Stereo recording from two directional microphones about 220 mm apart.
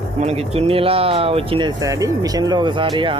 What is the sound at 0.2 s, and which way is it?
Speech, 30° right (ahead or behind).